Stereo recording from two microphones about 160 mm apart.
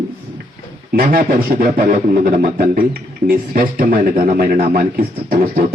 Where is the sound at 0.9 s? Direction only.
65° right (ahead or behind).